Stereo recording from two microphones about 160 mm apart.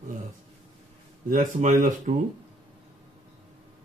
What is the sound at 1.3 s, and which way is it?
Speech, 55° right (ahead or behind).